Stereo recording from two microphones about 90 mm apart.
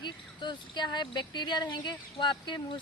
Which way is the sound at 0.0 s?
55° left (ahead or behind).